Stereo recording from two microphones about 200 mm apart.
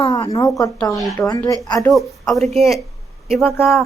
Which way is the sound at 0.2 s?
20° left (ahead or behind).